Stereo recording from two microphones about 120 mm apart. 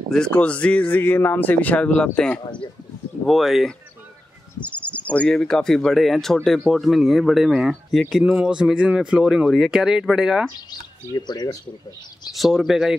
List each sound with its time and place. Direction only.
0.1 s speech: 5° left (ahead or behind)
4.6 s speech: 10° left (ahead or behind)
11.1 s speech: 35° left (ahead or behind)
12.4 s speech: centre (ahead or behind)